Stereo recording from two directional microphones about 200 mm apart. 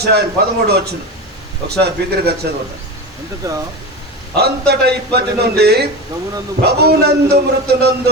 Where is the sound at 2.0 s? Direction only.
55° right (ahead or behind).